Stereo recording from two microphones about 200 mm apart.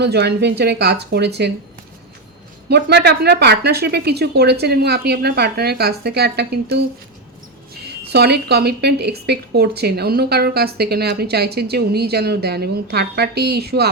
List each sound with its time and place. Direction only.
0.0 s speech: 55° right (ahead or behind)
2.6 s a woman's voice: 55° right (ahead or behind)
8.1 s a woman's voice: 55° right (ahead or behind)